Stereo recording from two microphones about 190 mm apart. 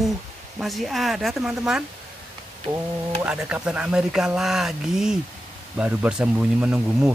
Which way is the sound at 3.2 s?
5° right (ahead or behind).